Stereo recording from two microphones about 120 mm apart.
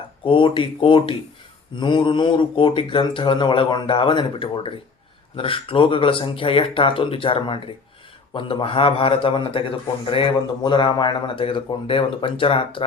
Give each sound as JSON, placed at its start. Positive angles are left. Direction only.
{"t": 0.3, "sound": "speech", "side_deg": 45}